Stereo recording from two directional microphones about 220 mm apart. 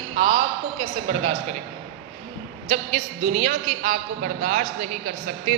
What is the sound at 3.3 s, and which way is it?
A man's voice, 35° right (ahead or behind).